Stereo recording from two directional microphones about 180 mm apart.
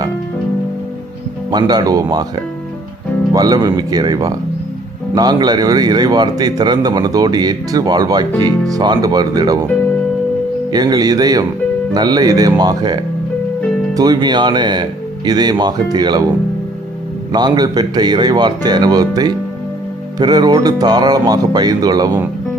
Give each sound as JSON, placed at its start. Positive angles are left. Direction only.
{"t": 1.5, "sound": "a man's voice", "side_deg": -25}
{"t": 10.7, "sound": "a man's voice", "side_deg": -20}
{"t": 17.3, "sound": "a man's voice", "side_deg": -20}